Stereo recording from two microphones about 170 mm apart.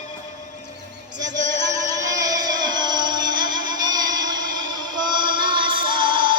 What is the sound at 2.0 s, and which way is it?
Music, 20° right (ahead or behind).